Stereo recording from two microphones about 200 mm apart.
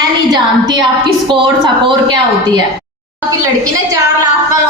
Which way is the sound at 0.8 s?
25° right (ahead or behind).